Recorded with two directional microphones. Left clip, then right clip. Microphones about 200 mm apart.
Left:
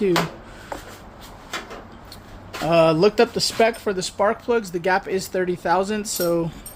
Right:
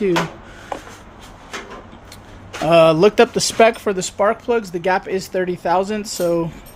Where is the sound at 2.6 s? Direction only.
10° right (ahead or behind).